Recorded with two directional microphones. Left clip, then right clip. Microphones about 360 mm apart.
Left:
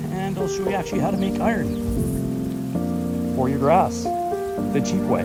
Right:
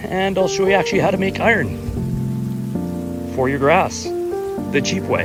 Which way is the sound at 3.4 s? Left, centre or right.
Centre.